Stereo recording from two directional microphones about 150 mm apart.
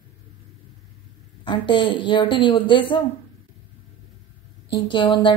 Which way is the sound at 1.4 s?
30° left (ahead or behind).